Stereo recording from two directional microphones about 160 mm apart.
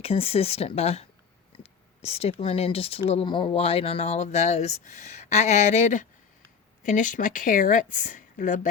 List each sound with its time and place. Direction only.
0.0 s speech: 40° left (ahead or behind); by 8.7 s 55° left (ahead or behind)